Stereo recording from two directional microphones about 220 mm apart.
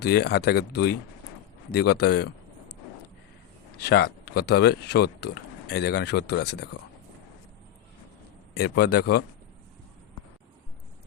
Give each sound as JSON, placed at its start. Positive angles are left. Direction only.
{"t": 0.0, "sound": "speech", "side_deg": 45}
{"t": 3.8, "sound": "speech", "side_deg": 50}
{"t": 8.5, "sound": "speech", "side_deg": 50}